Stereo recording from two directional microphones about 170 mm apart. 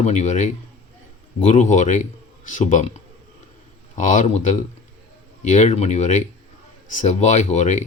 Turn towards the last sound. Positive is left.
turn(degrees=45)  # may be behind; listen again after turning